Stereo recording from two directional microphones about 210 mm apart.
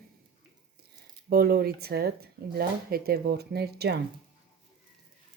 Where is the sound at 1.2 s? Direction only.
45° right (ahead or behind).